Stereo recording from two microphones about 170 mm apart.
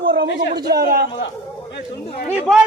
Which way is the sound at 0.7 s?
65° right (ahead or behind).